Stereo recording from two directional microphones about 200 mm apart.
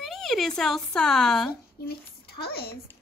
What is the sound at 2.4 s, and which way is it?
Speech, 50° left (ahead or behind).